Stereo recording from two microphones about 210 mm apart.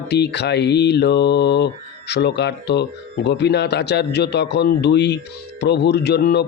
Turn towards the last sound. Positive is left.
turn(degrees=50)  # may be behind; listen again after turning